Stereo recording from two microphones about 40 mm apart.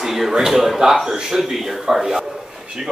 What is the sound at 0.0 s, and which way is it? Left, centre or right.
A man's voice, centre.